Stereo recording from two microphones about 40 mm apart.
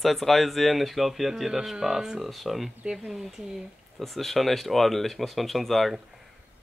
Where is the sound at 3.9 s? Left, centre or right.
Centre.